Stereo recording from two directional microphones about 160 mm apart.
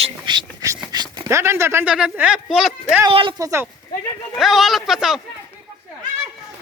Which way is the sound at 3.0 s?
30° right (ahead or behind).